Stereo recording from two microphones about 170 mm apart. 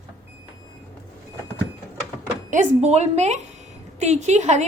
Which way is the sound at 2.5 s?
45° right (ahead or behind).